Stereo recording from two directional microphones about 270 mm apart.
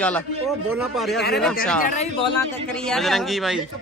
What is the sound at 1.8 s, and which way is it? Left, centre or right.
Speech, left.